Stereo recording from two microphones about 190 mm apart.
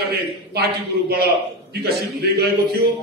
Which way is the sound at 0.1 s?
55° right (ahead or behind).